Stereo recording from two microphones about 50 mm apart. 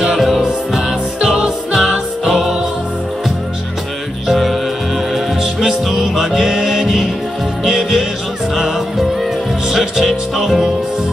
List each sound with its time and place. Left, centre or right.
0.0 s music: centre
4.3 s music: centre
5.4 s music: centre